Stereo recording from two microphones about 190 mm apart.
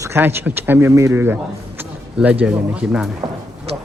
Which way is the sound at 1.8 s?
10° right (ahead or behind).